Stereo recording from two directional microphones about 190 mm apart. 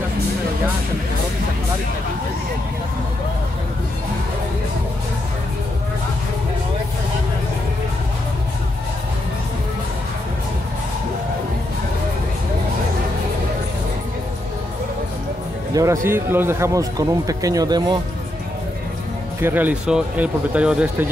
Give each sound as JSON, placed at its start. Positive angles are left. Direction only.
{"t": 15.7, "sound": "speech", "side_deg": -15}
{"t": 19.4, "sound": "speech", "side_deg": -10}